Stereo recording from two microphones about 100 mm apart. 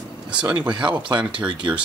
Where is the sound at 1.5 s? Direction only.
50° right (ahead or behind).